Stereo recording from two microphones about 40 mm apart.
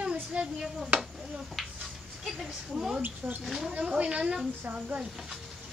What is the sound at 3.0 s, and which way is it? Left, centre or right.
Speech, right.